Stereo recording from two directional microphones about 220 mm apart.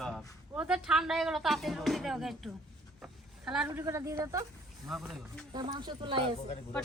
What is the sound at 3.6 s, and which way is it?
Speech, 10° right (ahead or behind).